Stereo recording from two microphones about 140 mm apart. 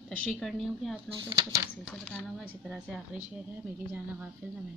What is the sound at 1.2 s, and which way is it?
Speech, 35° right (ahead or behind).